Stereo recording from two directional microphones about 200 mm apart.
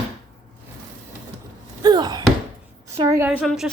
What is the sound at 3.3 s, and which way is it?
Speech, centre (ahead or behind).